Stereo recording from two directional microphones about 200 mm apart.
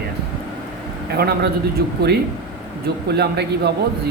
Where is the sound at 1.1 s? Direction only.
50° right (ahead or behind).